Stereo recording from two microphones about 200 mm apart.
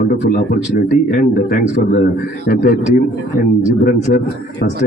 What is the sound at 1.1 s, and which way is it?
A man's voice, 50° left (ahead or behind).